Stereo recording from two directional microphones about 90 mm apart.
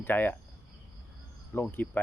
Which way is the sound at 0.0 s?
20° left (ahead or behind).